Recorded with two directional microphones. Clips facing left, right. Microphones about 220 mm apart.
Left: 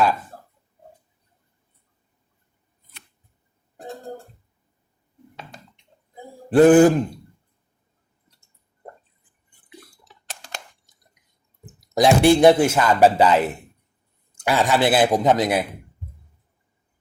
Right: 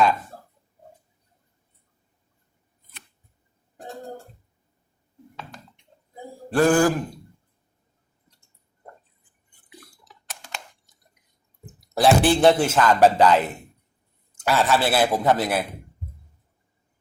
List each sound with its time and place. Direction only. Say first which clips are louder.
6.5 s speech: left 6 dB; 20° left (ahead or behind)
10.2 s a sound: left 1 dB; 35° left (ahead or behind)
11.8 s a man's voice: left 2 dB; 15° left (ahead or behind)